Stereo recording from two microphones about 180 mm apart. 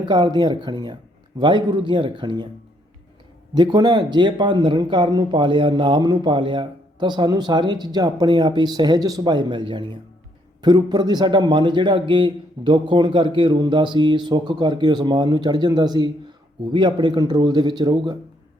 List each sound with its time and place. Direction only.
0.0 s speech: 25° right (ahead or behind)
3.5 s speech: 25° right (ahead or behind)